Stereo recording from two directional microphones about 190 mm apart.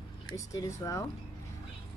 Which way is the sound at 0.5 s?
15° left (ahead or behind).